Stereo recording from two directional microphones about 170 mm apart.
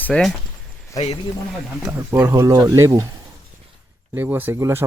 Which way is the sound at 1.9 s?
20° right (ahead or behind).